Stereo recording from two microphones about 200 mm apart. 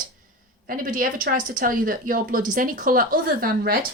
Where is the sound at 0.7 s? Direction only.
45° right (ahead or behind).